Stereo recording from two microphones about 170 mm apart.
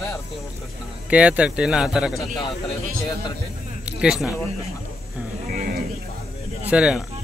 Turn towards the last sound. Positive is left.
turn(degrees=-5)  # may be behind; listen again after turning